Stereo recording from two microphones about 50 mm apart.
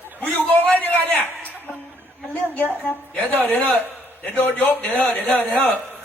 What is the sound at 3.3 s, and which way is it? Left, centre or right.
A man's voice, left.